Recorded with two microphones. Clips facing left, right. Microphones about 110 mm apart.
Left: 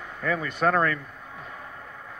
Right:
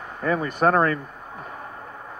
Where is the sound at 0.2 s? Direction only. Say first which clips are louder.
Right 4 dB; 35° right (ahead or behind).